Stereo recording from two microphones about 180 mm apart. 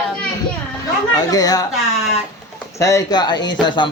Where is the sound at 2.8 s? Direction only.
20° left (ahead or behind).